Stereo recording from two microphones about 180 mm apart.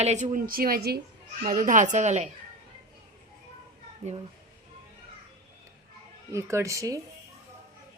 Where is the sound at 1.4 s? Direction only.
45° right (ahead or behind).